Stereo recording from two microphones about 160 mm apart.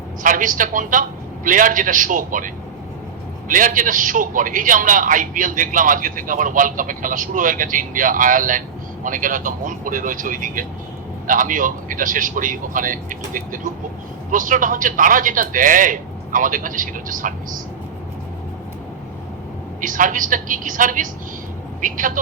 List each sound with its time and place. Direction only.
0.2 s a man's voice: 55° right (ahead or behind)
3.5 s a man's voice: 55° right (ahead or behind)
19.8 s a man's voice: 55° right (ahead or behind)